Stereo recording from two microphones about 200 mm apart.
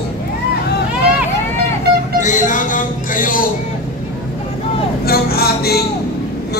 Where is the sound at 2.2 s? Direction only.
40° left (ahead or behind).